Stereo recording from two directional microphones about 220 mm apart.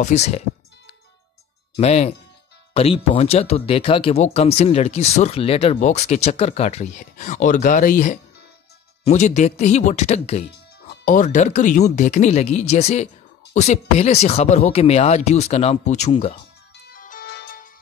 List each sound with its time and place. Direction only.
0.0 s speech: 30° left (ahead or behind)
1.8 s speech: 30° left (ahead or behind)
16.9 s music: 40° left (ahead or behind)